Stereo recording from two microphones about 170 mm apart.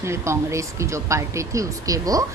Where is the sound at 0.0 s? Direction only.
15° right (ahead or behind).